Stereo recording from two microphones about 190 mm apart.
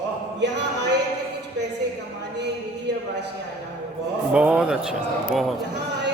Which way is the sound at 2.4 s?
65° right (ahead or behind).